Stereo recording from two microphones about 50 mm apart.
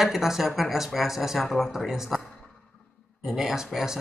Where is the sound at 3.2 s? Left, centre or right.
Centre.